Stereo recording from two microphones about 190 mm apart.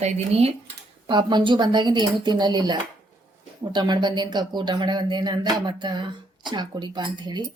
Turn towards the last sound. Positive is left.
turn(degrees=-20)  # may be behind; listen again after turning